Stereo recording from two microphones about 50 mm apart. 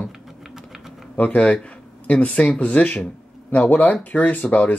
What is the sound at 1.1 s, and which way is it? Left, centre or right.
Speech, left.